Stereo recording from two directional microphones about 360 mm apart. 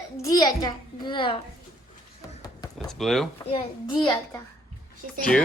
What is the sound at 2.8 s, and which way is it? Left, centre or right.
Speech, centre.